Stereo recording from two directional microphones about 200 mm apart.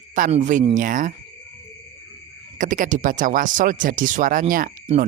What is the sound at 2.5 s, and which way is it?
Speech, 40° right (ahead or behind).